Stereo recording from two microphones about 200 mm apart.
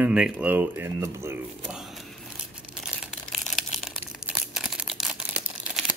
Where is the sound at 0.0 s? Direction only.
5° right (ahead or behind).